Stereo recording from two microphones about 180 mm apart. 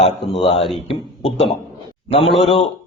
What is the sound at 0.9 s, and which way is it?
A man's voice, 30° left (ahead or behind).